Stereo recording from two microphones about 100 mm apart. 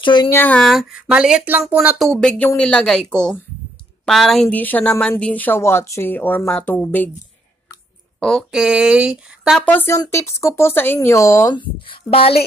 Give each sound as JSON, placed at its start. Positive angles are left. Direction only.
{"t": 0.0, "sound": "speech", "side_deg": 50}
{"t": 0.3, "sound": "speech", "side_deg": 20}
{"t": 0.6, "sound": "speech", "side_deg": 0}
{"t": 2.0, "sound": "a woman's voice", "side_deg": 5}
{"t": 4.5, "sound": "speech", "side_deg": 15}
{"t": 8.2, "sound": "speech", "side_deg": 5}
{"t": 8.5, "sound": "speech", "side_deg": -5}
{"t": 9.6, "sound": "speech", "side_deg": 20}
{"t": 9.9, "sound": "speech", "side_deg": 30}
{"t": 11.5, "sound": "a woman's voice", "side_deg": 65}